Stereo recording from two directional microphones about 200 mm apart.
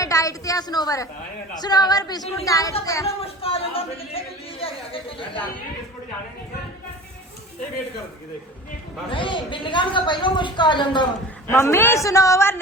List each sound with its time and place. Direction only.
0.0 s a woman's voice: 15° left (ahead or behind)
3.2 s a woman's voice: 30° left (ahead or behind)
9.0 s a woman's voice: 25° left (ahead or behind)